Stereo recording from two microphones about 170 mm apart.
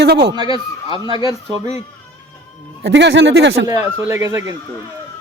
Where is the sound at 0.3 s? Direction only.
25° right (ahead or behind).